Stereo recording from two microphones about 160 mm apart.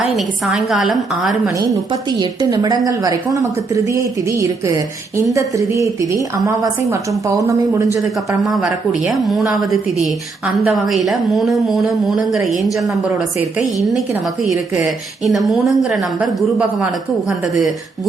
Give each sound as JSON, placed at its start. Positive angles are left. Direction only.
{"t": 0.0, "sound": "a woman's voice", "side_deg": 0}
{"t": 1.5, "sound": "a woman's voice", "side_deg": -25}
{"t": 8.4, "sound": "a woman's voice", "side_deg": 0}
{"t": 15.2, "sound": "a woman's voice", "side_deg": 0}